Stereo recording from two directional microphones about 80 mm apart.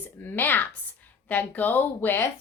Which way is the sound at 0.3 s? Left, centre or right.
Left.